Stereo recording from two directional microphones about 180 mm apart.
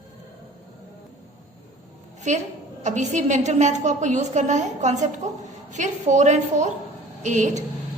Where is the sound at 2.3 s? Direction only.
40° right (ahead or behind).